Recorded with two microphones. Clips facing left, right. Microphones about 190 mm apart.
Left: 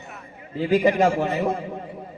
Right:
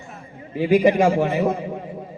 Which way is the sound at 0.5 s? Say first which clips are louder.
Right 3 dB; 15° right (ahead or behind).